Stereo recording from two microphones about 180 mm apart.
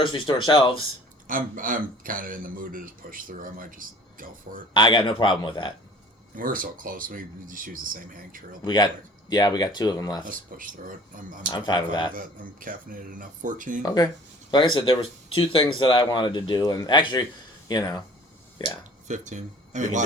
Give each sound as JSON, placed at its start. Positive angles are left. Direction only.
{"t": 0.0, "sound": "speech", "side_deg": 25}
{"t": 1.3, "sound": "speech", "side_deg": -50}
{"t": 4.7, "sound": "speech", "side_deg": 30}
{"t": 6.3, "sound": "speech", "side_deg": -50}
{"t": 8.6, "sound": "speech", "side_deg": 25}
{"t": 10.2, "sound": "speech", "side_deg": -50}
{"t": 11.5, "sound": "speech", "side_deg": 25}
{"t": 12.1, "sound": "speech", "side_deg": -50}
{"t": 13.8, "sound": "speech", "side_deg": 20}
{"t": 19.0, "sound": "speech", "side_deg": -45}